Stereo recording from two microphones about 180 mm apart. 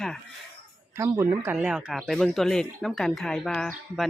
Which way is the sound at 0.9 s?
15° right (ahead or behind).